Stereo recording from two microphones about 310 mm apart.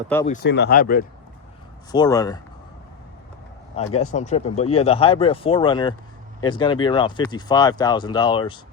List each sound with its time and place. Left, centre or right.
0.4 s speech: left
1.9 s speech: centre
3.8 s speech: centre